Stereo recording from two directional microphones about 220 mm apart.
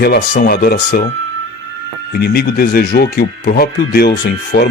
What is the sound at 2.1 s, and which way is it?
Speech, 45° left (ahead or behind).